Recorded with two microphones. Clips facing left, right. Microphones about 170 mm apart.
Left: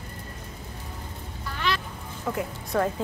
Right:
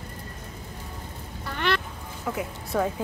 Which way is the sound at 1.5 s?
60° right (ahead or behind).